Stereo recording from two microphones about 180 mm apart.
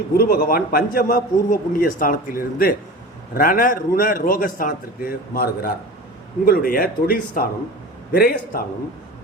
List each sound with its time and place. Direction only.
0.2 s a man's voice: 60° left (ahead or behind)